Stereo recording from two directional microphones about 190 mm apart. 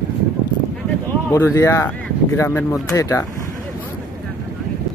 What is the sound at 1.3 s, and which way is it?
Speech, 15° left (ahead or behind).